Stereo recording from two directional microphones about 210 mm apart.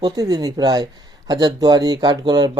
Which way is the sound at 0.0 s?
20° right (ahead or behind).